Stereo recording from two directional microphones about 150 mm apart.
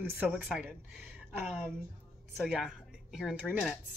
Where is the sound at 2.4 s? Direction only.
5° right (ahead or behind).